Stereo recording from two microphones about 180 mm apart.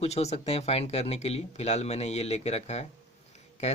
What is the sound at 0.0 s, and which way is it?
Speech, 35° left (ahead or behind).